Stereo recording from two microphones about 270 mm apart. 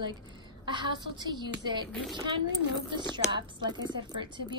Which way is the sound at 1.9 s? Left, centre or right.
Centre.